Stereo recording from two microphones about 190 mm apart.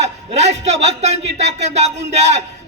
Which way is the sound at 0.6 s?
35° right (ahead or behind).